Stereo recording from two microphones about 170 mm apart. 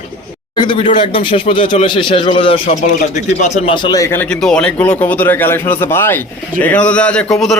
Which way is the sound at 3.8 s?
25° left (ahead or behind).